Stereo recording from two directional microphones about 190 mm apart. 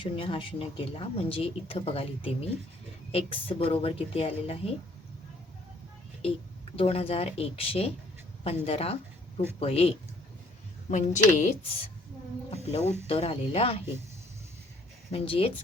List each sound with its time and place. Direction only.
0.0 s speech: 25° left (ahead or behind)
6.7 s speech: 30° left (ahead or behind)
10.9 s speech: 40° left (ahead or behind)
15.1 s speech: 30° left (ahead or behind)